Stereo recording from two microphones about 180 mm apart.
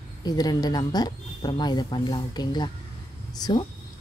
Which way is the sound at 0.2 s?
20° left (ahead or behind).